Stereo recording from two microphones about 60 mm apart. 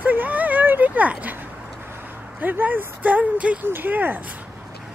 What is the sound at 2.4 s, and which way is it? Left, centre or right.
Speech, right.